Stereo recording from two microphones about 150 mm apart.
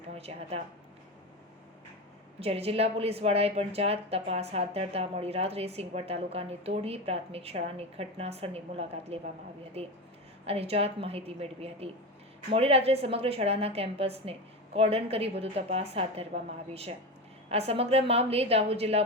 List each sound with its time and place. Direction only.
0.1 s a woman's voice: 45° right (ahead or behind)
2.4 s a woman's voice: 40° right (ahead or behind)